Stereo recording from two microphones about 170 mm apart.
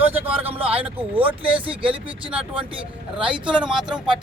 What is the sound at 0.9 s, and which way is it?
Speech, 10° right (ahead or behind).